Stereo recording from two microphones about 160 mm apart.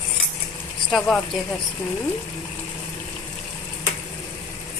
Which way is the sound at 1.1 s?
Centre (ahead or behind).